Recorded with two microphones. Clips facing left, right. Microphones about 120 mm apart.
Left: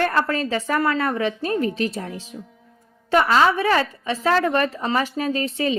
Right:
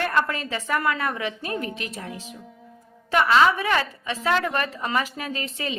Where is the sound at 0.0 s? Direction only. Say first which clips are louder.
Left 3 dB; 35° left (ahead or behind).